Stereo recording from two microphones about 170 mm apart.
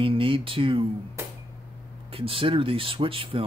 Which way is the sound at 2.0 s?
35° right (ahead or behind).